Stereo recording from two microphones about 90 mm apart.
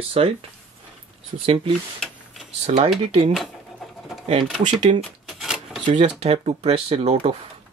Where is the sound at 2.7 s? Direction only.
90° right.